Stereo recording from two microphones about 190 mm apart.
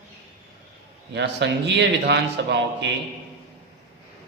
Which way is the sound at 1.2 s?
65° right (ahead or behind).